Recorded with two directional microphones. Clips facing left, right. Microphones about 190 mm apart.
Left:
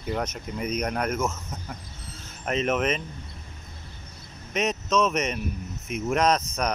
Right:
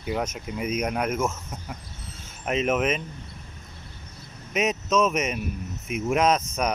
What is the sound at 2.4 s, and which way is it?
Speech, 5° right (ahead or behind).